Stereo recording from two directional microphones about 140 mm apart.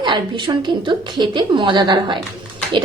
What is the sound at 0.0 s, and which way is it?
A woman's voice, 35° right (ahead or behind).